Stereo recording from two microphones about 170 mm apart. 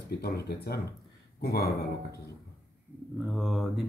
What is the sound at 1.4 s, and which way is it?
Speech, 65° left (ahead or behind).